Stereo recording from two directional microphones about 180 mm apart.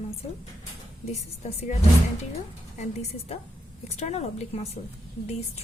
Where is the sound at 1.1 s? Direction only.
35° left (ahead or behind).